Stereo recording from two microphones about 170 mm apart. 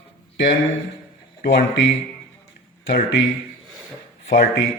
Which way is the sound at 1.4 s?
90° left.